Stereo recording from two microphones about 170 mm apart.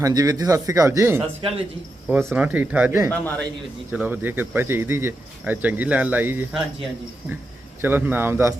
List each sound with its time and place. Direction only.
0.0 s speech: 20° right (ahead or behind)
1.4 s speech: 35° right (ahead or behind)
2.0 s speech: 5° right (ahead or behind)
3.1 s a man's voice: 10° left (ahead or behind)
3.9 s speech: 10° right (ahead or behind)
7.8 s speech: 10° right (ahead or behind)